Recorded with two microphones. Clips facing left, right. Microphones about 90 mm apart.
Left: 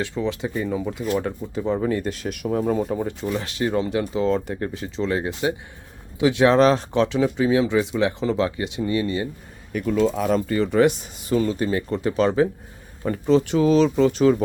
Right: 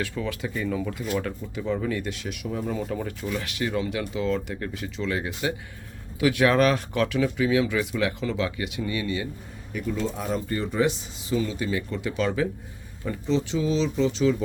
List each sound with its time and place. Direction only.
0.0 s speech: 25° left (ahead or behind)
1.0 s speech: 35° left (ahead or behind)
2.8 s speech: 25° left (ahead or behind)
9.7 s speech: 80° left; by 12.5 s 35° left (ahead or behind)
13.0 s speech: 55° left (ahead or behind)